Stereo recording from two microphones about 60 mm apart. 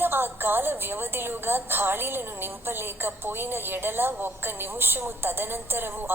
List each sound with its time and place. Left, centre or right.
0.0 s a woman's voice: right